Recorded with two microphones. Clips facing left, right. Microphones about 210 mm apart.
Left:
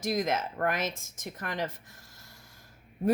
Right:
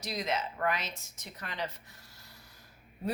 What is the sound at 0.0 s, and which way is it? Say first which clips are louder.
A woman's voice: left 5 dB; 50° left (ahead or behind).